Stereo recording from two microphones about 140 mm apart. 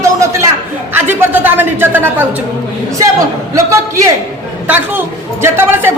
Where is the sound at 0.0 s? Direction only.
20° right (ahead or behind).